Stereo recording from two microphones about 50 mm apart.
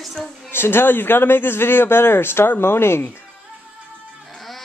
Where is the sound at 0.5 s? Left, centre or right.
Left.